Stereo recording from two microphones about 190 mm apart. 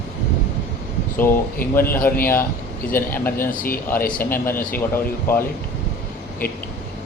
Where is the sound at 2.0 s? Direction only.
10° left (ahead or behind).